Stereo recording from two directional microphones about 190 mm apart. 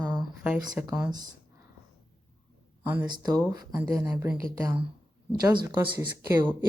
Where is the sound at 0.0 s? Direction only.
5° right (ahead or behind).